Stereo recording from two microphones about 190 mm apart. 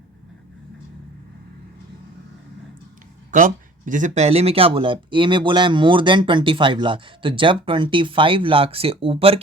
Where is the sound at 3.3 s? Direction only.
45° right (ahead or behind).